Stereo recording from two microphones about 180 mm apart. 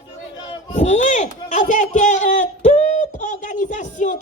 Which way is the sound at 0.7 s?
40° left (ahead or behind).